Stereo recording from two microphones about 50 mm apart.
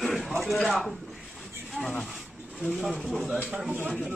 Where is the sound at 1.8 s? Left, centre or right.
Right.